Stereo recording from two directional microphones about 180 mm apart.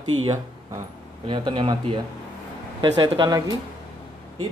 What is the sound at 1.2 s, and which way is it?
Speech, 25° right (ahead or behind).